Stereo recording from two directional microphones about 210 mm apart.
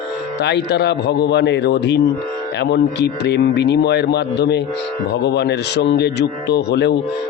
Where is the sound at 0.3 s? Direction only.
55° left (ahead or behind).